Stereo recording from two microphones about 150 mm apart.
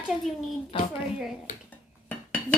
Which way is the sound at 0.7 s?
35° left (ahead or behind).